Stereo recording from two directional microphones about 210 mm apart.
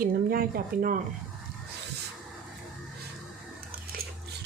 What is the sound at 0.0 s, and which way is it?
Speech, 45° right (ahead or behind).